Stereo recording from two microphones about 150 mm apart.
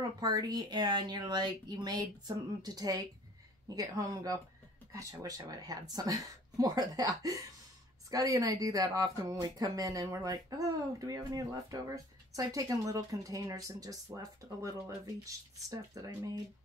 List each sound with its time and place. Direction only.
0.2 s speech: 25° right (ahead or behind)